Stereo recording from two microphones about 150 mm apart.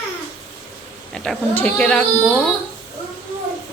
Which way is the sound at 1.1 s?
5° left (ahead or behind).